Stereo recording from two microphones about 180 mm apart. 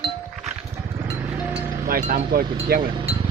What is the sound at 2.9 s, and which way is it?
Speech, 35° right (ahead or behind).